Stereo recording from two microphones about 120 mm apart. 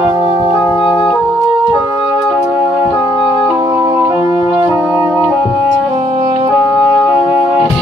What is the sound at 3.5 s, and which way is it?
Music, 30° right (ahead or behind).